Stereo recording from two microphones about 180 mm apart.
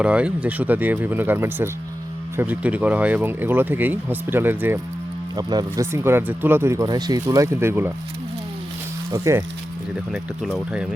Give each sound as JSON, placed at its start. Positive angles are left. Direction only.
{"t": 0.0, "sound": "speech", "side_deg": -5}
{"t": 9.1, "sound": "speech", "side_deg": -15}
{"t": 10.1, "sound": "speech", "side_deg": -5}